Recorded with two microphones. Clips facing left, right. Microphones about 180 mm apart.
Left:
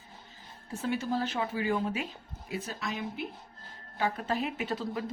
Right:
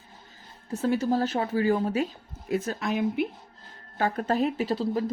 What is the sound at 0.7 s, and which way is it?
A woman's voice, 40° right (ahead or behind).